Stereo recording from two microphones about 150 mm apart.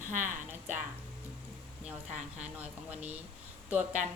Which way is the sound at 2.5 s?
10° right (ahead or behind).